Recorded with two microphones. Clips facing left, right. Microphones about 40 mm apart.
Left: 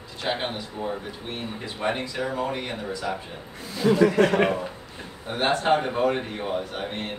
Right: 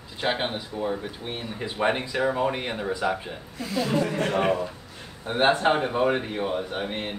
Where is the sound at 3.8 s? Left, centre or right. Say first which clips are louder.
Left 9 dB; left.